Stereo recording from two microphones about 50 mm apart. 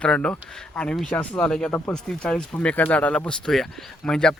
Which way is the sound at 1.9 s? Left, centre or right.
Centre.